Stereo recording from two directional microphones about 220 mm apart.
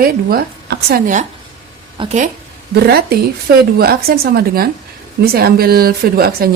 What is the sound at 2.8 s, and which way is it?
A woman's voice, 45° right (ahead or behind).